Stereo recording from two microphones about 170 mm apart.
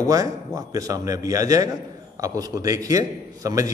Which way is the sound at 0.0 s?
20° right (ahead or behind).